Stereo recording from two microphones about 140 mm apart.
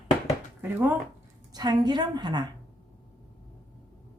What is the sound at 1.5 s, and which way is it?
Speech, 30° right (ahead or behind).